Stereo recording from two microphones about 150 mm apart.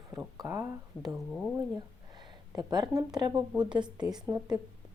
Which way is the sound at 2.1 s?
30° right (ahead or behind).